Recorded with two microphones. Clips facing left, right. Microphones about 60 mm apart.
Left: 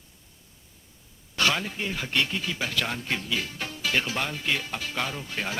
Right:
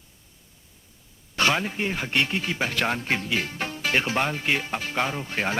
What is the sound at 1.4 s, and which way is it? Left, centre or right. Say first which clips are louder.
Speech: right 3 dB; right.